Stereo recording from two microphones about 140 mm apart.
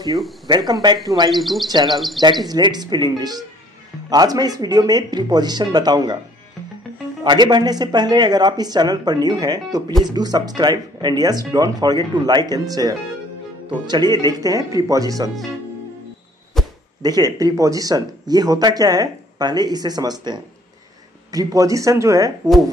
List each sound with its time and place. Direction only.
0.5 s speech: 30° right (ahead or behind)
1.3 s speech: centre (ahead or behind)
1.7 s speech: 30° right (ahead or behind)
2.0 s speech: centre (ahead or behind)
2.4 s speech: 30° right (ahead or behind)
7.2 s speech: 30° right (ahead or behind)
16.6 s chop: centre (ahead or behind)
17.0 s speech: 25° right (ahead or behind)